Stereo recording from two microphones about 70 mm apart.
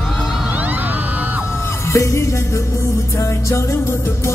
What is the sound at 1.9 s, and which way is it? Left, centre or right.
Music, left.